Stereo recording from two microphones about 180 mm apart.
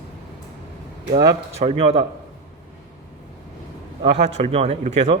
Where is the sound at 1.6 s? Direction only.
30° right (ahead or behind).